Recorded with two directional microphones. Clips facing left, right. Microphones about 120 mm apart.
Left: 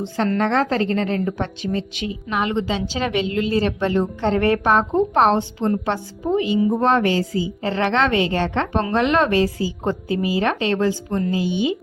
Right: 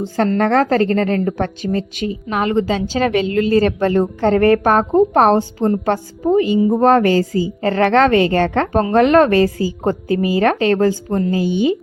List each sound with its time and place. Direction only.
0.3 s a woman's voice: 45° right (ahead or behind)